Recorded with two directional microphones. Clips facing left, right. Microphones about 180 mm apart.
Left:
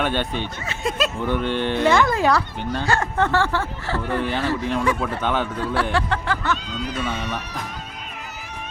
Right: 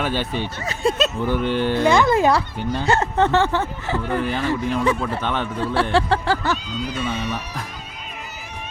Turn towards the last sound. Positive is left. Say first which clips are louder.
# right 1 dB
turn(degrees=-5)  # may be behind; listen again after turning